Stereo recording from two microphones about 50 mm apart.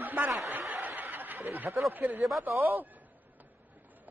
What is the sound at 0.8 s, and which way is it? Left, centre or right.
Snicker, right.